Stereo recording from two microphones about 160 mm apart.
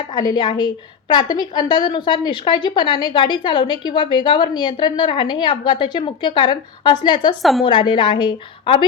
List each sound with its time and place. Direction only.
0.1 s a woman's voice: 25° left (ahead or behind)